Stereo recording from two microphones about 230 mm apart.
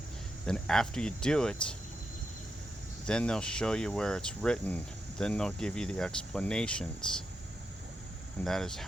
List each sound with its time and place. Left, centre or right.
0.4 s speech: centre
3.1 s speech: centre
8.4 s speech: centre